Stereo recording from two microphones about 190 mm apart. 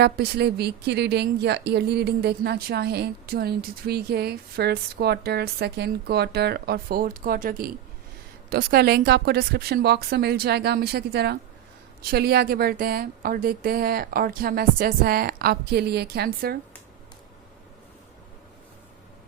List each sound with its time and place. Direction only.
0.0 s a woman's voice: 60° right (ahead or behind)